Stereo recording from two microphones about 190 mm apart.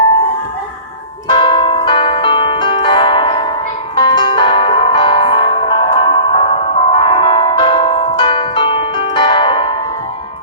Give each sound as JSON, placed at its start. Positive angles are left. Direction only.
{"t": 1.3, "sound": "music", "side_deg": 25}